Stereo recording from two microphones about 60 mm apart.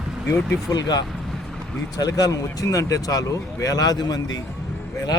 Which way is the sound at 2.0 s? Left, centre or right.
Left.